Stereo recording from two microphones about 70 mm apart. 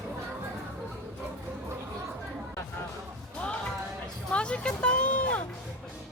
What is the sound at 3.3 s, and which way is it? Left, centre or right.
Music, centre.